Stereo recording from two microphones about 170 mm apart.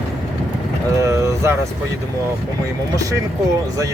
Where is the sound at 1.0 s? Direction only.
15° right (ahead or behind).